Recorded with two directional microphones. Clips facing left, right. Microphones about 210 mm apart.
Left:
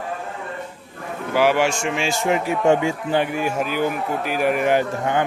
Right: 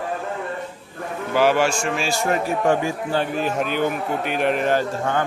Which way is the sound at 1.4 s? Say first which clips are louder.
Even; 15° left (ahead or behind).